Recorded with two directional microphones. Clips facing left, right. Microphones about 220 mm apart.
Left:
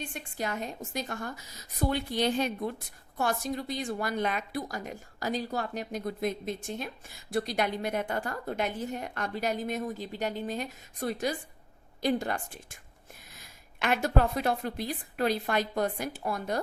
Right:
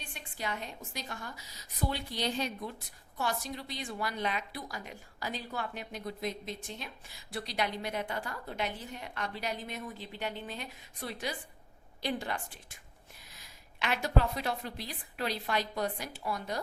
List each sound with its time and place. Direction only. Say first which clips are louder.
0.1 s a woman's voice: left 5 dB; 45° left (ahead or behind)